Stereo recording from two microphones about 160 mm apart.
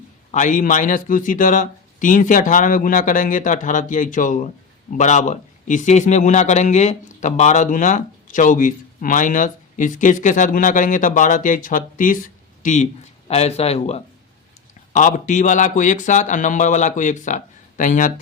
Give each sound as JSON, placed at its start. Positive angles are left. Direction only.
{"t": 0.3, "sound": "a man's voice", "side_deg": 50}
{"t": 14.9, "sound": "a man's voice", "side_deg": 50}